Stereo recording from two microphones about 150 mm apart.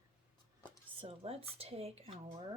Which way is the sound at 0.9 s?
40° right (ahead or behind).